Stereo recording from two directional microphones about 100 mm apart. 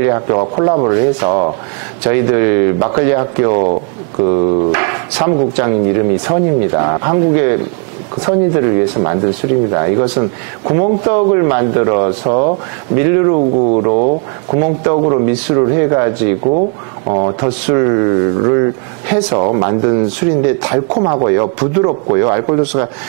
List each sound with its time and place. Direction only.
0.0 s speech: 25° right (ahead or behind)
13.4 s speech: 35° right (ahead or behind)